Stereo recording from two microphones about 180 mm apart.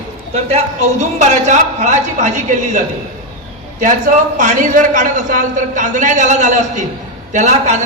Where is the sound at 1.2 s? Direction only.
40° right (ahead or behind).